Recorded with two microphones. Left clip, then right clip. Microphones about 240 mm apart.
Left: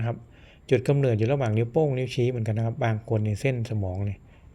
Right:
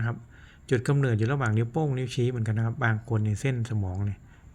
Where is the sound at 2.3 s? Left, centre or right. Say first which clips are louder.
Left 2 dB; right.